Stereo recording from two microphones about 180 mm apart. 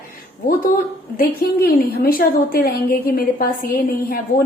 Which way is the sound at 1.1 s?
55° left (ahead or behind).